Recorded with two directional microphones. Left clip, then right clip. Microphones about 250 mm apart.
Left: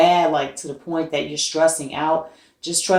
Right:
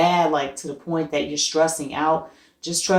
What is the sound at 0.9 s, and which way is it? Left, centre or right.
Speech, right.